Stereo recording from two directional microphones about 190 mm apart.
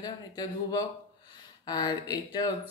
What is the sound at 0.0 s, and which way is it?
Speech, 20° left (ahead or behind).